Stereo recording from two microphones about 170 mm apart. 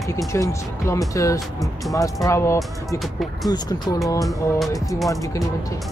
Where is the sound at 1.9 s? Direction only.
20° left (ahead or behind).